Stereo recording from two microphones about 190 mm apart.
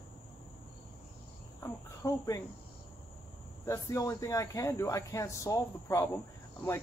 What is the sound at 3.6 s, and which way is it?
Speech, 15° left (ahead or behind).